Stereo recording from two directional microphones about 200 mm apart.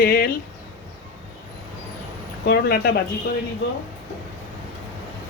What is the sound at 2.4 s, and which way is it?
Speech, 50° left (ahead or behind).